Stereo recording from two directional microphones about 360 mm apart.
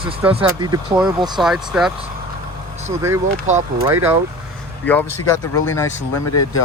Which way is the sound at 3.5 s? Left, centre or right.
Centre.